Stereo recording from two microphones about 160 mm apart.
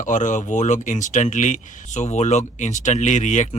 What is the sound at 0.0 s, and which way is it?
Speech, 50° left (ahead or behind).